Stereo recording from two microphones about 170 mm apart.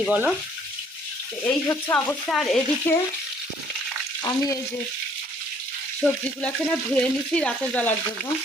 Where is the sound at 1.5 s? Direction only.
15° left (ahead or behind).